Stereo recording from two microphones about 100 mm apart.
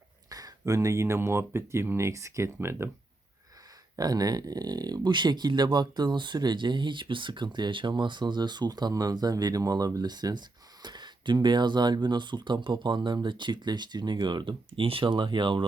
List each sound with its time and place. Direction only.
0.3 s speech: 40° right (ahead or behind)
3.9 s speech: 40° right (ahead or behind)